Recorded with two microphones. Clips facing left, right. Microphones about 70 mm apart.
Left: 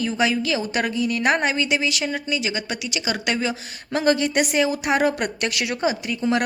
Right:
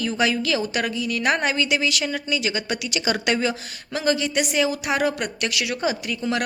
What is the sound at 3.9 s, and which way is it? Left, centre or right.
A woman's voice, left.